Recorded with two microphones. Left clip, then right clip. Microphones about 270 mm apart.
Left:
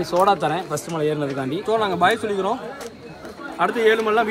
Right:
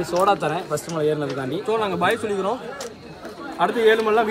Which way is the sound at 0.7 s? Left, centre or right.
Left.